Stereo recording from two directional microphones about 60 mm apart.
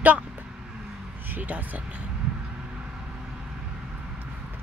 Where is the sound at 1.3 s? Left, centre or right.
Right.